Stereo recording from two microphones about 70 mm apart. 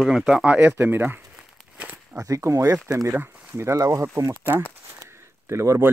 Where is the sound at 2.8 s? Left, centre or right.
Right.